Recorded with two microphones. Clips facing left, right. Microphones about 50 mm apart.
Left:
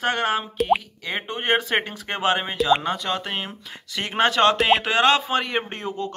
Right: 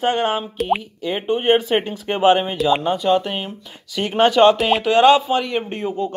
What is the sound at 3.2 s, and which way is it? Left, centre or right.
Speech, centre.